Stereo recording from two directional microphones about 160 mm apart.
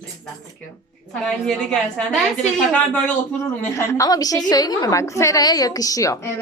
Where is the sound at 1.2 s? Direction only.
5° left (ahead or behind).